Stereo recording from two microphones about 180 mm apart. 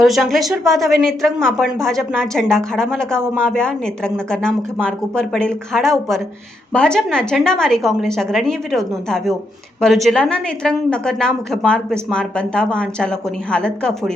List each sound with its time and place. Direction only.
0.0 s a woman's voice: centre (ahead or behind)